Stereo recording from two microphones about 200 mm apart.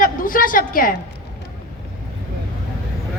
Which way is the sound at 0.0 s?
45° left (ahead or behind).